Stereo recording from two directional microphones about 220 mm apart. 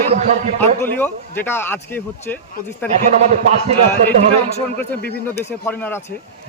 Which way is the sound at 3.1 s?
30° right (ahead or behind).